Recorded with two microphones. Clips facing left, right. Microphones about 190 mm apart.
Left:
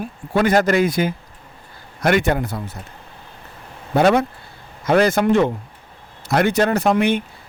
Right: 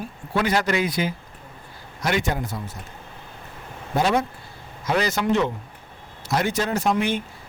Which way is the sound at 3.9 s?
60° left (ahead or behind).